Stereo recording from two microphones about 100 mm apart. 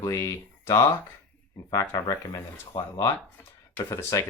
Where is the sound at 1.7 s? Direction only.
35° left (ahead or behind).